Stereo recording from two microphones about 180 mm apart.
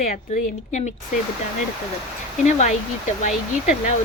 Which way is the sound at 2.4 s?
40° left (ahead or behind).